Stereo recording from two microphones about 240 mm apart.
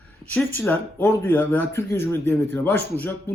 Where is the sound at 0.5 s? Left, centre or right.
Centre.